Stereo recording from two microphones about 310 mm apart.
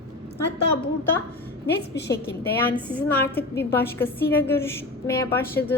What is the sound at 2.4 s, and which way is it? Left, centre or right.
A woman's voice, centre.